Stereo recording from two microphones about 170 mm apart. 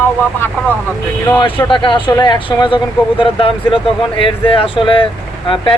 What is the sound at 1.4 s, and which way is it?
Speech, 30° left (ahead or behind).